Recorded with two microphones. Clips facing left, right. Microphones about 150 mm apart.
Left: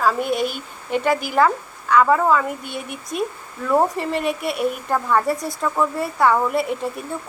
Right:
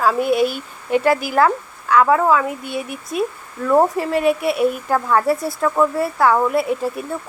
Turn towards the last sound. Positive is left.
turn(degrees=0)  # may be behind; listen again after turning